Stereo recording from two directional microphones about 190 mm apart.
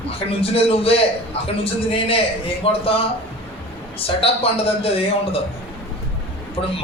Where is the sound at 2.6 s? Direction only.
30° left (ahead or behind).